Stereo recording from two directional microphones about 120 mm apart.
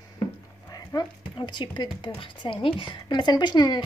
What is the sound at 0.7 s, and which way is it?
A woman's voice, 35° left (ahead or behind).